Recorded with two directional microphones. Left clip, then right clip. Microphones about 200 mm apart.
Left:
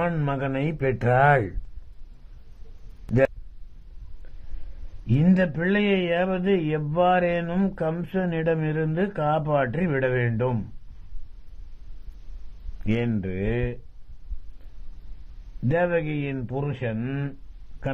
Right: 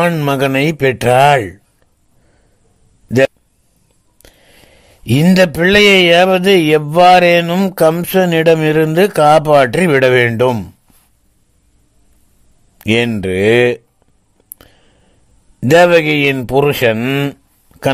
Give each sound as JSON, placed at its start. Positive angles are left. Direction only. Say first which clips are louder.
{"t": 0.2, "sound": "speech", "louder": "right 14 dB", "side_deg": -45}
{"t": 0.7, "sound": "speech", "louder": "right 10 dB", "side_deg": -35}
{"t": 5.0, "sound": "speech", "louder": "right 13 dB", "side_deg": -50}
{"t": 12.8, "sound": "speech", "louder": "right 14 dB", "side_deg": -40}
{"t": 15.6, "sound": "speech", "louder": "right 16 dB", "side_deg": -50}